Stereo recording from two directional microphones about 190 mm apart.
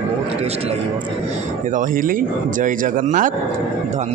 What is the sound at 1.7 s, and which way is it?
A man's voice, 45° right (ahead or behind).